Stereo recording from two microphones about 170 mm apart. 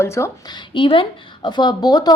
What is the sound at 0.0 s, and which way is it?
A woman's voice, 15° left (ahead or behind).